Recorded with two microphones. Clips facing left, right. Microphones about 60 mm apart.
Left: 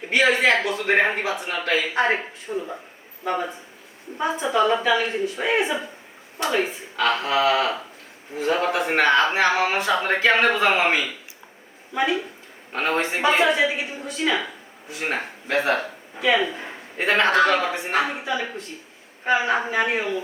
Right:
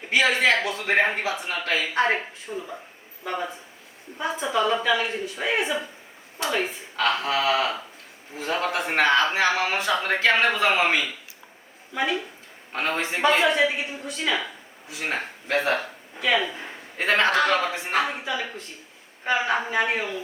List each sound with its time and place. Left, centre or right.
0.0 s a man's voice: centre
2.5 s speech: left
3.2 s a man's voice: centre